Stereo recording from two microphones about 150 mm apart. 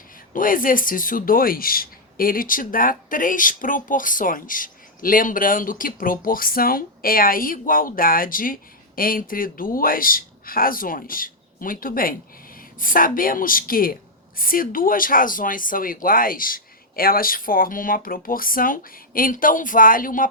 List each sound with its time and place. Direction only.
0.3 s speech: 65° left (ahead or behind)